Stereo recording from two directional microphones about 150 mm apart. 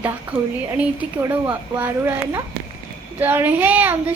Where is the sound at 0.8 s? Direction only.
10° right (ahead or behind).